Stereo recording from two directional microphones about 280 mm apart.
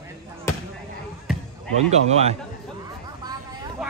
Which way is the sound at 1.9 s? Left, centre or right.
Right.